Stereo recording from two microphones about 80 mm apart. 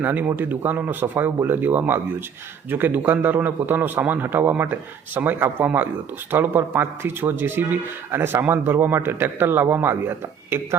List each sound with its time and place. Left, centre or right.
0.0 s speech: right